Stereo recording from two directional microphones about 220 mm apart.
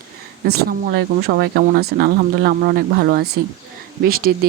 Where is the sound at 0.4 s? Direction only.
45° right (ahead or behind).